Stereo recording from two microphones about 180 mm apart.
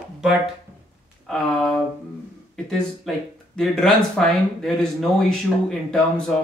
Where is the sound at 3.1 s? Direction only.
Centre (ahead or behind).